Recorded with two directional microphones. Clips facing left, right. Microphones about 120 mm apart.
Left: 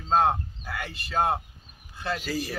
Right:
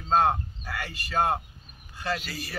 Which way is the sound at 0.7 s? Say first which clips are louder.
Even; 5° left (ahead or behind).